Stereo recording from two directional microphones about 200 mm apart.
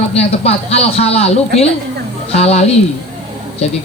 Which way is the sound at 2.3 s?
30° left (ahead or behind).